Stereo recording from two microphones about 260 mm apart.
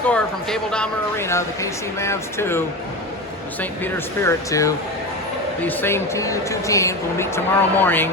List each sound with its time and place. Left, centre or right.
0.1 s speech: centre